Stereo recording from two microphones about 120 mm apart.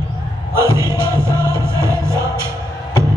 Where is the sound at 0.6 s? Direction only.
20° right (ahead or behind).